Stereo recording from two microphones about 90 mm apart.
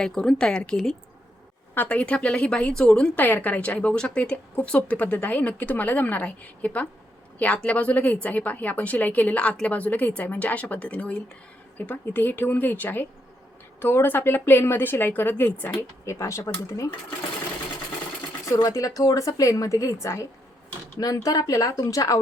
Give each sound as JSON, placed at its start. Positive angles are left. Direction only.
{"t": 0.0, "sound": "a woman's voice", "side_deg": 5}
{"t": 16.0, "sound": "a woman's voice", "side_deg": 30}
{"t": 18.4, "sound": "a woman's voice", "side_deg": 40}